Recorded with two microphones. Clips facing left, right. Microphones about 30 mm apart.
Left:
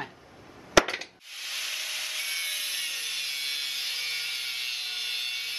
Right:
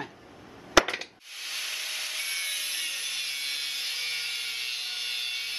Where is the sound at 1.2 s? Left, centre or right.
Centre.